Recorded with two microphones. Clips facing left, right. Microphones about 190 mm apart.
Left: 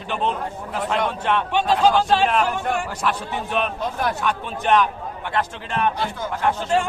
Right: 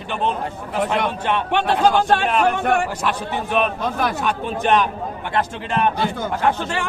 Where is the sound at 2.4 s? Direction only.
70° right (ahead or behind).